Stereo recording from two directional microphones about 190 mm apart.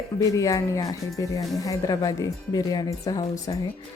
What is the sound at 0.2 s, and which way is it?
A woman's voice, 15° left (ahead or behind).